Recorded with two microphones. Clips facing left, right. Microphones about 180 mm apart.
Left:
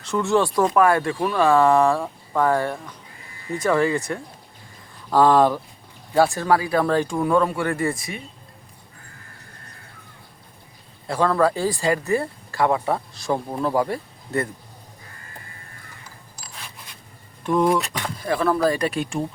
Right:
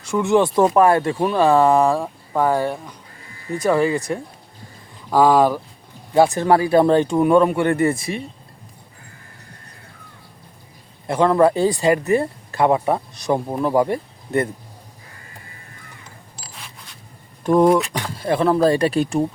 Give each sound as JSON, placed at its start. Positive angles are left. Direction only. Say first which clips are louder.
{"t": 0.0, "sound": "speech", "louder": "right 3 dB", "side_deg": -15}
{"t": 6.1, "sound": "speech", "louder": "right 4 dB", "side_deg": -20}
{"t": 11.0, "sound": "speech", "louder": "right 4 dB", "side_deg": -20}
{"t": 17.4, "sound": "speech", "louder": "right 5 dB", "side_deg": -40}
{"t": 18.2, "sound": "speech", "louder": "right 4 dB", "side_deg": -25}